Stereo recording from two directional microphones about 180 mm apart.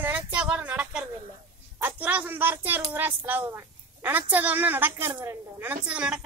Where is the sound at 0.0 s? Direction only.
10° right (ahead or behind).